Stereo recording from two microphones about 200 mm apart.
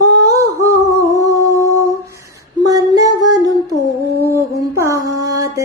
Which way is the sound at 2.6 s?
20° right (ahead or behind).